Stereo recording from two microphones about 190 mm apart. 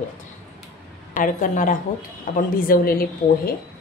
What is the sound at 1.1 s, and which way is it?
A woman's voice, 45° left (ahead or behind).